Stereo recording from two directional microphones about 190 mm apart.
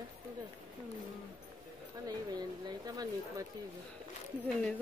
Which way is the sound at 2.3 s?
20° right (ahead or behind).